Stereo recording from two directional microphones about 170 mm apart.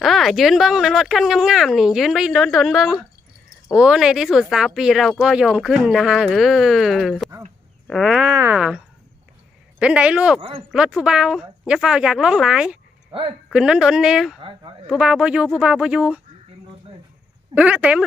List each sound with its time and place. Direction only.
0.0 s speech: centre (ahead or behind)
14.4 s speech: 30° right (ahead or behind)
14.8 s speech: 5° right (ahead or behind)
17.5 s speech: 10° right (ahead or behind)